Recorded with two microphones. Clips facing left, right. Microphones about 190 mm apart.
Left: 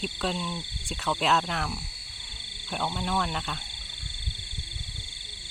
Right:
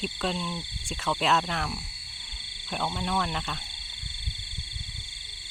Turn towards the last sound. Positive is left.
turn(degrees=0)  # may be behind; listen again after turning